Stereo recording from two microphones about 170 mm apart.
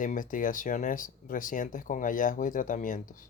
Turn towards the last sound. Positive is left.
turn(degrees=50)  # may be behind; listen again after turning